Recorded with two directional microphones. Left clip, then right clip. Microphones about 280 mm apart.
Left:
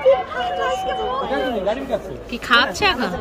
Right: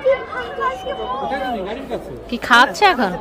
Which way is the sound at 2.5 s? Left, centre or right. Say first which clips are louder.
Right 4 dB; centre.